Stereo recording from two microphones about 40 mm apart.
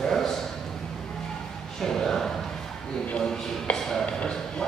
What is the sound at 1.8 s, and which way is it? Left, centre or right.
Speech, centre.